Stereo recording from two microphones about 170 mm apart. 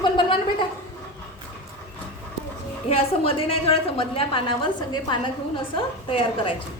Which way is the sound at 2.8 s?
35° left (ahead or behind).